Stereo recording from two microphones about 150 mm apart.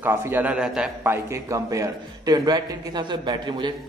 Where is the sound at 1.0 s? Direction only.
15° right (ahead or behind).